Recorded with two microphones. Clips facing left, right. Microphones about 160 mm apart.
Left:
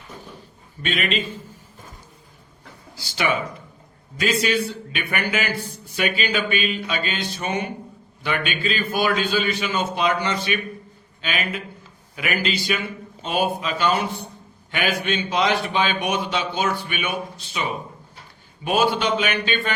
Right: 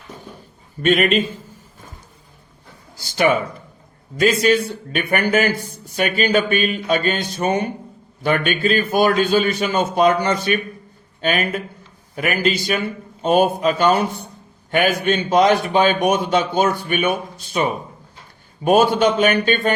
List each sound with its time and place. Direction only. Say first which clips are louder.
0.8 s a man's voice: right 9 dB; 45° right (ahead or behind)
3.0 s a man's voice: right 6 dB; 45° right (ahead or behind)